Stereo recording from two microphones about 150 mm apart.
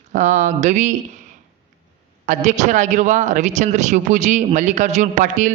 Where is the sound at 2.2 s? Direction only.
55° right (ahead or behind).